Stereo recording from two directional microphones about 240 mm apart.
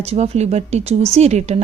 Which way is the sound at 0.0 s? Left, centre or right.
Right.